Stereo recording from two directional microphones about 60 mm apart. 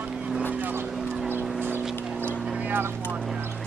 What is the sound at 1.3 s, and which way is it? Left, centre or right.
Vehicle, right.